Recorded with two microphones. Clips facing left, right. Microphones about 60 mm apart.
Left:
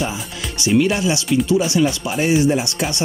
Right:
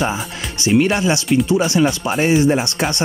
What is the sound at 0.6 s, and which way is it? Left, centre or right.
Speech, right.